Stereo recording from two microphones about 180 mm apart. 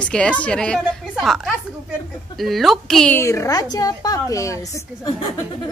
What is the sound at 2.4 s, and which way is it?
Speech, centre (ahead or behind).